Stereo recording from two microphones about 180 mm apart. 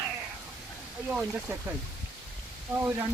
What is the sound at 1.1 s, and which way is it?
Speech, 5° right (ahead or behind).